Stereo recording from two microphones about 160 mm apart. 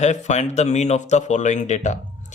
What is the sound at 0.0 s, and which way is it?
Speech, 45° left (ahead or behind).